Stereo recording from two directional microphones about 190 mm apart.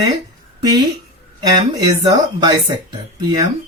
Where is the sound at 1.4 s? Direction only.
20° right (ahead or behind).